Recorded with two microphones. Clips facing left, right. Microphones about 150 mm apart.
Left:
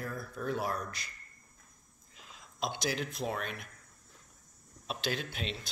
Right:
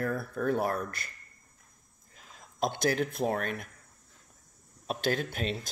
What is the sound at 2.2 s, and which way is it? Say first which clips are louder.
Speech: right 6 dB; 50° right (ahead or behind).